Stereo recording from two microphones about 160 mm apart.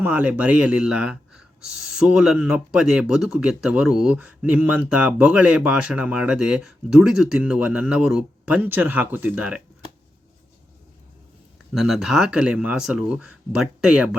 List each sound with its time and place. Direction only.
0.0 s speech: 10° right (ahead or behind)
11.7 s speech: centre (ahead or behind)